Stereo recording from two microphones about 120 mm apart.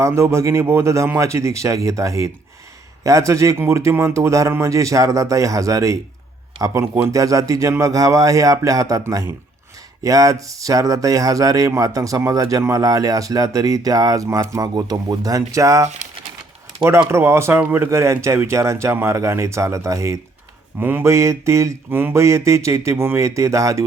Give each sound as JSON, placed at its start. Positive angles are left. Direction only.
{"t": 0.0, "sound": "speech", "side_deg": -25}
{"t": 7.1, "sound": "speech", "side_deg": -30}
{"t": 17.1, "sound": "speech", "side_deg": -20}